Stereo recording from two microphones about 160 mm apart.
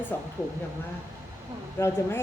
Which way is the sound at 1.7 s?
15° left (ahead or behind).